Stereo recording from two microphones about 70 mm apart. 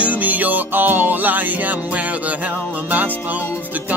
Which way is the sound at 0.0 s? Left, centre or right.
Right.